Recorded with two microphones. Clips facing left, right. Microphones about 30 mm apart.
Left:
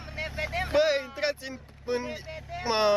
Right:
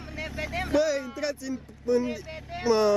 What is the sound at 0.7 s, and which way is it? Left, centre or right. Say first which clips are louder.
Speech: left 1 dB; left.